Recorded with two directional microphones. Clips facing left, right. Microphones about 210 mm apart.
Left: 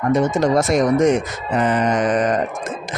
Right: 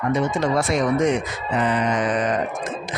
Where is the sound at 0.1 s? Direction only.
45° left (ahead or behind).